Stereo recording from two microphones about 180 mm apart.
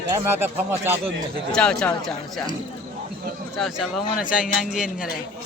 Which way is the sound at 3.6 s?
Centre (ahead or behind).